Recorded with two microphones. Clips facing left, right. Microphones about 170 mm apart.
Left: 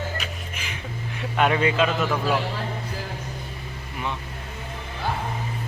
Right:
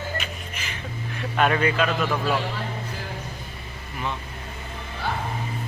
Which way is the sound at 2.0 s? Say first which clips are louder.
Left 1 dB; 10° left (ahead or behind).